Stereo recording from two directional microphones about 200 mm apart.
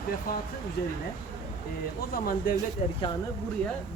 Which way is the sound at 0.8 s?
55° left (ahead or behind).